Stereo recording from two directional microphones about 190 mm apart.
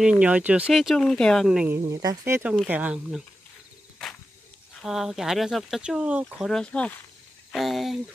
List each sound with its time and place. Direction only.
0.0 s speech: 5° right (ahead or behind)
2.0 s speech: 15° right (ahead or behind)
4.8 s speech: centre (ahead or behind)